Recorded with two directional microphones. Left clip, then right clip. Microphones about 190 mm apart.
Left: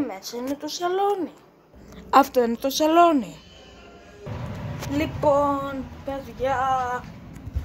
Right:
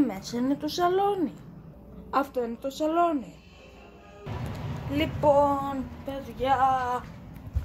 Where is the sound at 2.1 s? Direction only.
50° left (ahead or behind).